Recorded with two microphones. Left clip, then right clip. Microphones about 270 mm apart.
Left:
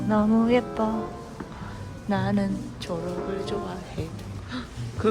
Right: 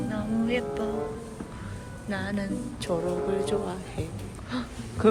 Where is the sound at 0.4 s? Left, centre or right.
Centre.